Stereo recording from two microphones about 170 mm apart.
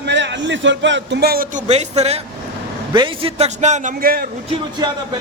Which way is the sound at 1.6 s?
40° right (ahead or behind).